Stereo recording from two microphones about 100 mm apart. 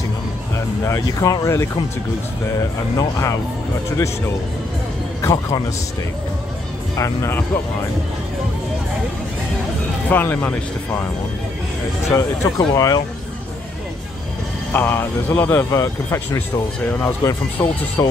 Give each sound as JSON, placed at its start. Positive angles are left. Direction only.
{"t": 0.8, "sound": "speech", "side_deg": 35}
{"t": 3.0, "sound": "speech", "side_deg": 35}
{"t": 5.2, "sound": "speech", "side_deg": 35}
{"t": 7.0, "sound": "speech", "side_deg": 30}
{"t": 10.0, "sound": "speech", "side_deg": 20}
{"t": 12.1, "sound": "speech", "side_deg": 35}
{"t": 14.7, "sound": "speech", "side_deg": 20}
{"t": 17.6, "sound": "speech", "side_deg": 20}
{"t": 18.0, "sound": "speech", "side_deg": 40}